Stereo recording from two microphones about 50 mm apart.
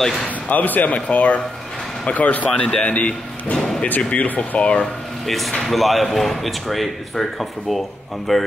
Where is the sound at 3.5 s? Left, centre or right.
Centre.